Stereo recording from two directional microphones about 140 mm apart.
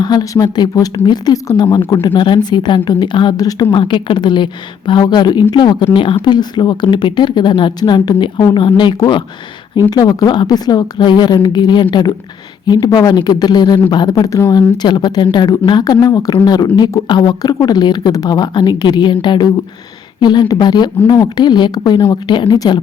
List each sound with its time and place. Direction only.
0.0 s speech: 30° left (ahead or behind)